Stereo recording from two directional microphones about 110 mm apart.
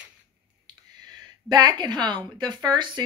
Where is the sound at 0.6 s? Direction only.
40° right (ahead or behind).